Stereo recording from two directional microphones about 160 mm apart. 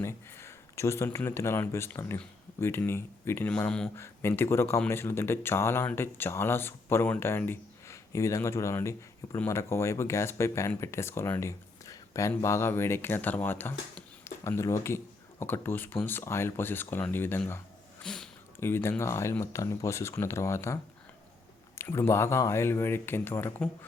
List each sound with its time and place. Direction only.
0.0 s speech: 15° left (ahead or behind)
18.6 s speech: 15° left (ahead or behind)
21.8 s speech: 15° left (ahead or behind)